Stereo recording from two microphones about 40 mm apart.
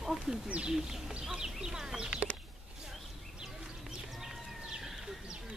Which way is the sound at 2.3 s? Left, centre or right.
Left.